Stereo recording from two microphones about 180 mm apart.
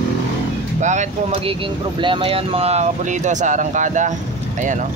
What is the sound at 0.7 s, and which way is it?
Speech, 40° right (ahead or behind).